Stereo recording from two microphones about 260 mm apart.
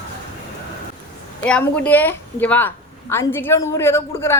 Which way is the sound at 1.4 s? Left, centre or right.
Centre.